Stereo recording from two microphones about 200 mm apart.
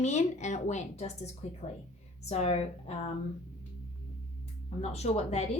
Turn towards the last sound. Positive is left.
turn(degrees=35)  # may be behind; listen again after turning